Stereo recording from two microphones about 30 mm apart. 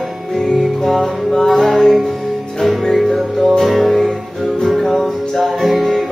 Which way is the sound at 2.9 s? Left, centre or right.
Centre.